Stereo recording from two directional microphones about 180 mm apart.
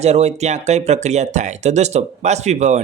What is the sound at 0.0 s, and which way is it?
Speech, 35° right (ahead or behind).